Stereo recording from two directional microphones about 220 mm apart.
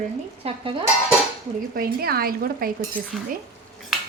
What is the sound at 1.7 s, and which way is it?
Speech, 45° right (ahead or behind).